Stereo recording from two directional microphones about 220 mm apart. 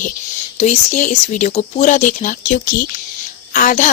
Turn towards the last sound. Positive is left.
turn(degrees=35)  # may be behind; listen again after turning